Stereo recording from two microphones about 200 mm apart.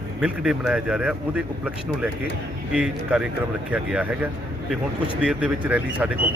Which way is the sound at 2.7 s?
5° right (ahead or behind).